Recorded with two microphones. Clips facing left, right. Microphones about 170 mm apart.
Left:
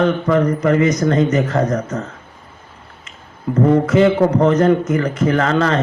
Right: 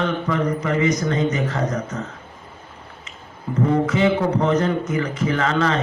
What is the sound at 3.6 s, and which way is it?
A man's voice, 50° left (ahead or behind).